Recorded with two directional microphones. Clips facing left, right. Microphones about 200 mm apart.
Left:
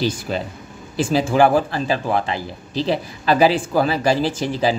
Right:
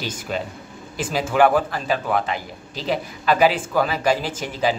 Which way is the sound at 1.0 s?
30° left (ahead or behind).